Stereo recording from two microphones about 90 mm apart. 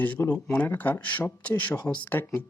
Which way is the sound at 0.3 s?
10° left (ahead or behind).